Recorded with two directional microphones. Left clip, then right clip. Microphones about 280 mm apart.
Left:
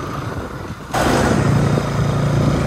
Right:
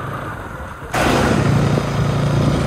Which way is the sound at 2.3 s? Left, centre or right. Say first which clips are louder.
Even; centre.